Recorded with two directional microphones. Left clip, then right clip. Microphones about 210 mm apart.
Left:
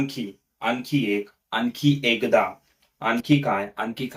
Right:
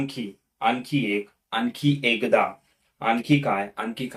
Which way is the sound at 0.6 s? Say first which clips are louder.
Right 1 dB; centre (ahead or behind).